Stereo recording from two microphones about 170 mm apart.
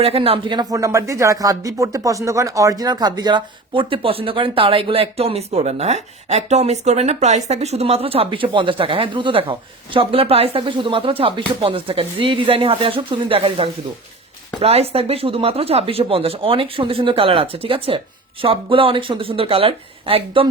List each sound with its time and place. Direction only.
0.0 s speech: 35° right (ahead or behind)